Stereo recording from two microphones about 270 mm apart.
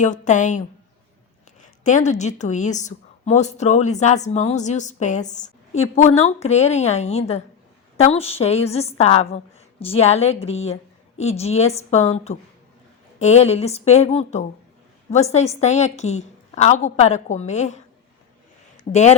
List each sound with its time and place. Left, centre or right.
0.0 s a woman's voice: left
1.6 s a woman's voice: left
18.9 s a woman's voice: left